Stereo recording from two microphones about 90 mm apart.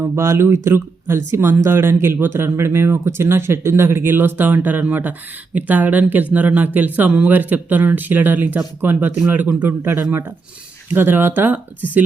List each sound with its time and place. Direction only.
0.0 s speech: 30° right (ahead or behind)